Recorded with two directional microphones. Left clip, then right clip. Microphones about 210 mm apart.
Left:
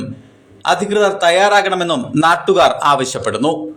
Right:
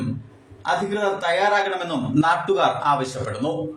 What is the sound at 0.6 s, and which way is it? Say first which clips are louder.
A man's voice: left 8 dB; 45° left (ahead or behind).